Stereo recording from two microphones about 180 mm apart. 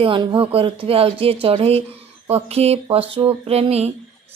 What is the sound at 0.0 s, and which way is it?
Speech, 25° right (ahead or behind).